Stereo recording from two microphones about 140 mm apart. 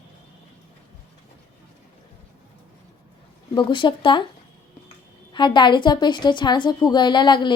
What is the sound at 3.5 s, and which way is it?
Speech, 35° left (ahead or behind).